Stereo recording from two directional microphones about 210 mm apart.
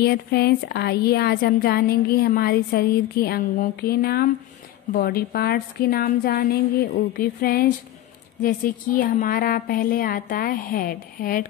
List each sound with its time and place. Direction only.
0.0 s speech: 50° left (ahead or behind)